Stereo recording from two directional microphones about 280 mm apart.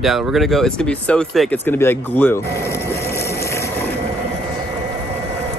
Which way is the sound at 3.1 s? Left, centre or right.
Centre.